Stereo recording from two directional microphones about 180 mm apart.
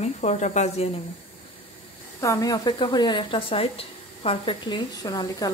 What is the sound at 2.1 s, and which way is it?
Speech, 15° left (ahead or behind).